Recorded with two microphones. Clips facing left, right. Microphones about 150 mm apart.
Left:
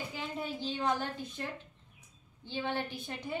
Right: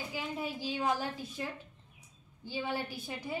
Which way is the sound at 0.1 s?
5° right (ahead or behind).